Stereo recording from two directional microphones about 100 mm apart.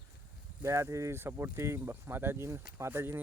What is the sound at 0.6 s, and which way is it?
Speech, 25° right (ahead or behind).